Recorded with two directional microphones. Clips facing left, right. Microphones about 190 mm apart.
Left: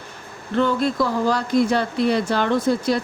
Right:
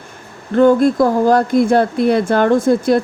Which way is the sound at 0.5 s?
50° right (ahead or behind).